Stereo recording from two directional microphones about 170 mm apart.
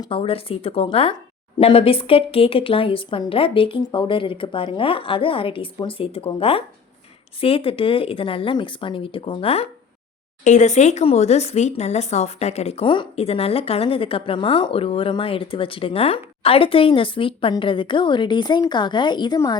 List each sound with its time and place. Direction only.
0.0 s speech: 30° left (ahead or behind)
10.4 s speech: 45° left (ahead or behind); by 19.5 s 25° left (ahead or behind)